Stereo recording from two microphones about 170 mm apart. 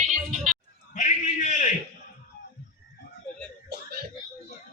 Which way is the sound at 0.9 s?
45° left (ahead or behind).